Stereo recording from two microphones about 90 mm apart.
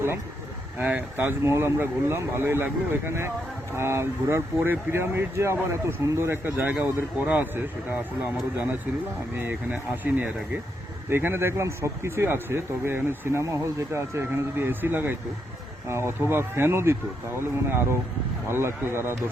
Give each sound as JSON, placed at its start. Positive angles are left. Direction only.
{"t": 0.8, "sound": "speech", "side_deg": -20}
{"t": 9.3, "sound": "speech", "side_deg": -20}